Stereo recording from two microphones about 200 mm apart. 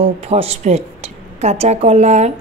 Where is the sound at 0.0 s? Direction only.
30° right (ahead or behind).